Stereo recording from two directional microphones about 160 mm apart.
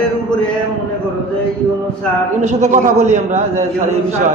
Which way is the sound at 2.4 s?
45° right (ahead or behind).